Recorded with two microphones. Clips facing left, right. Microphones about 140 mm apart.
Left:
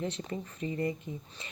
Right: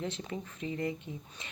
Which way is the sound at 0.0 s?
Centre (ahead or behind).